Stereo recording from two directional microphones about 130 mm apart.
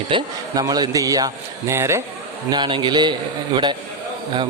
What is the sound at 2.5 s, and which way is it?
A man's voice, 35° right (ahead or behind).